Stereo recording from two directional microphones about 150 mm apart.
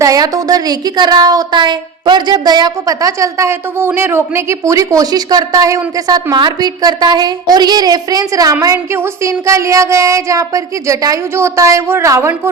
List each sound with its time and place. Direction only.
0.0 s a woman's voice: 25° right (ahead or behind)